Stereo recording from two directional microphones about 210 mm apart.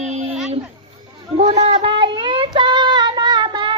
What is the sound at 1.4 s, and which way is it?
Child singing, 30° right (ahead or behind).